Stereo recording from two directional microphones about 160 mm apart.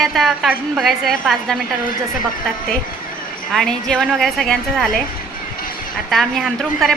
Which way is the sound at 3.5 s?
5° left (ahead or behind).